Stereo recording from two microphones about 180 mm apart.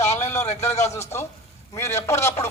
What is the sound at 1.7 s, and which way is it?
Speech, 15° left (ahead or behind).